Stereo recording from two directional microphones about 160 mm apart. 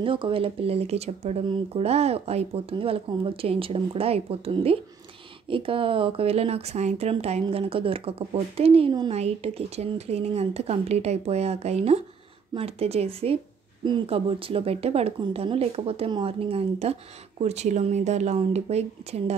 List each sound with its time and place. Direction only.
0.0 s speech: 35° right (ahead or behind)